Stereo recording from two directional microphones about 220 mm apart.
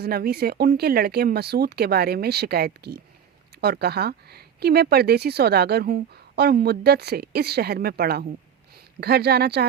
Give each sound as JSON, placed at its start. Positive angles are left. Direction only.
{"t": 0.0, "sound": "speech", "side_deg": -45}